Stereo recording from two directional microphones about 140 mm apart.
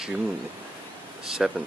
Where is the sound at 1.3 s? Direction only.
5° right (ahead or behind).